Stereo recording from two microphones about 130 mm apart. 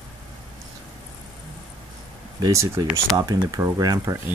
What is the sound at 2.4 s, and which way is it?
Speech, 25° right (ahead or behind).